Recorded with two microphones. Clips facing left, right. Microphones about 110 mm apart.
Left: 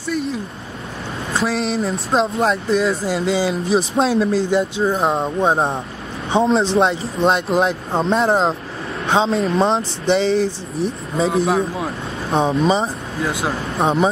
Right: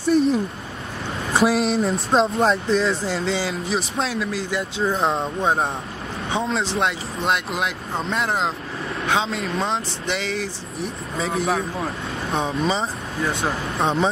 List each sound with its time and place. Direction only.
1.4 s speech: centre (ahead or behind)
3.4 s speech: 30° left (ahead or behind)
5.0 s speech: 15° left (ahead or behind)
5.5 s speech: 30° left (ahead or behind)
12.8 s speech: 5° left (ahead or behind)
13.7 s speech: 15° left (ahead or behind)